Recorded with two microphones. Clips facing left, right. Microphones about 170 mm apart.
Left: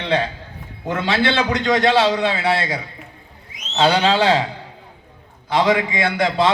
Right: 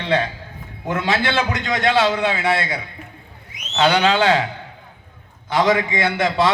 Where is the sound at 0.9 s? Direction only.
30° left (ahead or behind).